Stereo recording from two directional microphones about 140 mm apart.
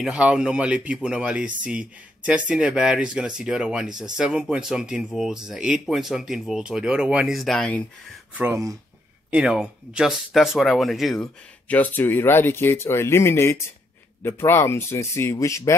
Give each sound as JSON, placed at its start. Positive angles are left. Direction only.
{"t": 0.0, "sound": "speech", "side_deg": -5}
{"t": 8.4, "sound": "speech", "side_deg": -20}
{"t": 9.3, "sound": "speech", "side_deg": -5}
{"t": 11.6, "sound": "speech", "side_deg": 10}